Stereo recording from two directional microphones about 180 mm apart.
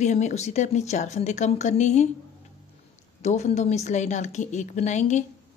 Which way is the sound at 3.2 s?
40° left (ahead or behind).